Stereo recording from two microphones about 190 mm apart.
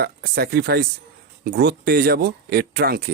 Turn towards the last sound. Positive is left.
turn(degrees=-50)  # may be behind; listen again after turning